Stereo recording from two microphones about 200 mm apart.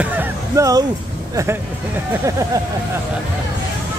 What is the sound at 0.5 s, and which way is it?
Speech, 15° right (ahead or behind).